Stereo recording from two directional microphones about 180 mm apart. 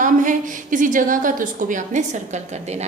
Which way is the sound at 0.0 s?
45° right (ahead or behind).